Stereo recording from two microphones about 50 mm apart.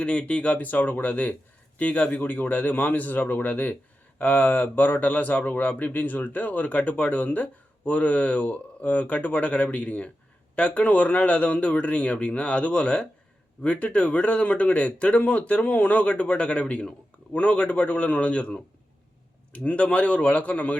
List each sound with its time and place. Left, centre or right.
0.0 s speech: left